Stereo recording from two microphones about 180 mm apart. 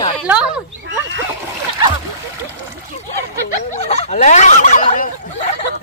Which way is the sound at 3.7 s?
40° left (ahead or behind).